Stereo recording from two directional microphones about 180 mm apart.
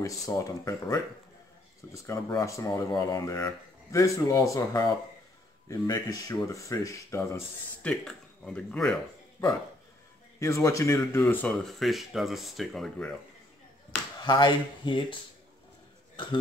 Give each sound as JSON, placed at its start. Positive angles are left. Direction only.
{"t": 0.3, "sound": "speech", "side_deg": 15}
{"t": 2.0, "sound": "speech", "side_deg": 20}
{"t": 7.8, "sound": "speech", "side_deg": 5}
{"t": 9.4, "sound": "speech", "side_deg": 15}
{"t": 14.2, "sound": "speech", "side_deg": 25}